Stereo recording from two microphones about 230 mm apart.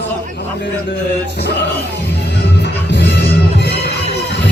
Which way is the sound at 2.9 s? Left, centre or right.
Left.